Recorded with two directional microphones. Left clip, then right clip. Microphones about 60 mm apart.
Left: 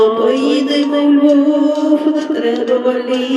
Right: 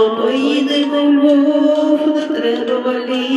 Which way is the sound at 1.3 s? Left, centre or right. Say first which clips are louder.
Even; centre.